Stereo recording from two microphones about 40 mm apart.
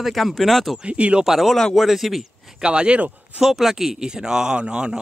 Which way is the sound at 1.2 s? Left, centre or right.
Centre.